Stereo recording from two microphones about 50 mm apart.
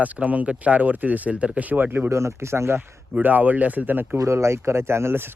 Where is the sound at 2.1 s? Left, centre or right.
Right.